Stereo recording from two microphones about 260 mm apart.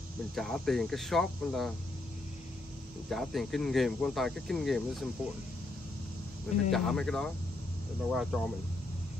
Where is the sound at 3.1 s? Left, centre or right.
Centre.